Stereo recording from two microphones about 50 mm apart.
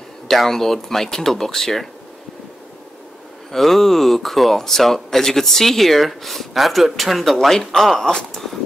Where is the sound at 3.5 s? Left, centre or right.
Centre.